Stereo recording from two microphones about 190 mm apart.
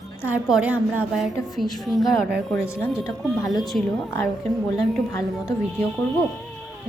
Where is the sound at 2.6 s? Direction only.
15° left (ahead or behind).